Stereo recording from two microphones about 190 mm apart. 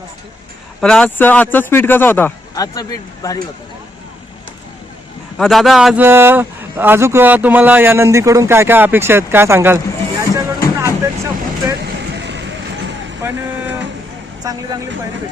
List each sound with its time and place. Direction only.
0.8 s a man's voice: 5° left (ahead or behind)
5.4 s a man's voice: centre (ahead or behind); by 10.9 s 15° right (ahead or behind)
12.1 s vehicle: 65° right (ahead or behind)
14.4 s speech: 20° right (ahead or behind)